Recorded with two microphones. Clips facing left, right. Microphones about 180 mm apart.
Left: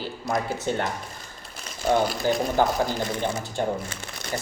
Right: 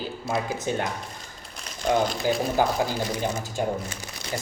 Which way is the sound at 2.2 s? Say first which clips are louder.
Left 1 dB; 5° right (ahead or behind).